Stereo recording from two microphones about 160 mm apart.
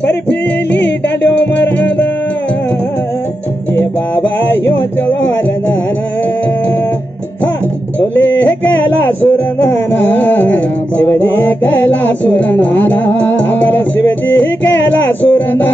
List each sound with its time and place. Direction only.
0.0 s music: 90° left
3.7 s music: 10° left (ahead or behind)
8.4 s music: 10° left (ahead or behind)